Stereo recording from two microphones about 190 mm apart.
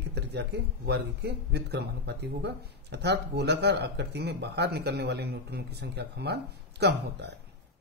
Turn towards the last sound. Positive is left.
turn(degrees=-65)  # may be behind; listen again after turning